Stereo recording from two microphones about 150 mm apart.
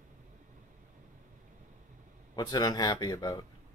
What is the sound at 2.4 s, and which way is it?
Speech, 25° left (ahead or behind).